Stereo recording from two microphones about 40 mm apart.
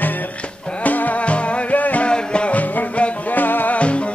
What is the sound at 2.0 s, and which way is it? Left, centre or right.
Music, left.